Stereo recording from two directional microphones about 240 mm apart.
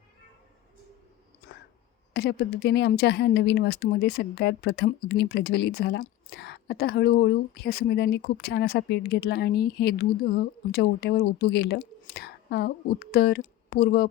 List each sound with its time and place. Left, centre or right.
2.1 s a woman's voice: left